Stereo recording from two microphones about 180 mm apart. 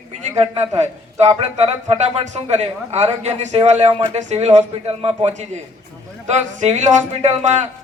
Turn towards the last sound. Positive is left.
turn(degrees=-35)  # may be behind; listen again after turning